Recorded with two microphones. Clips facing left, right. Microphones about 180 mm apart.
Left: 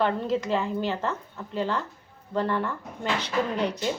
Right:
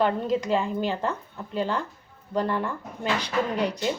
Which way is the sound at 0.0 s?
15° right (ahead or behind).